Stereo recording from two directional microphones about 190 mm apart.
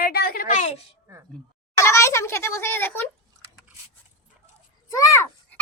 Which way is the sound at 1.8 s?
15° left (ahead or behind).